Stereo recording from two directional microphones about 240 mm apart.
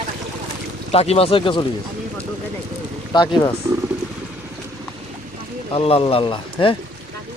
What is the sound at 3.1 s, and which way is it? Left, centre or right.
Speech, centre.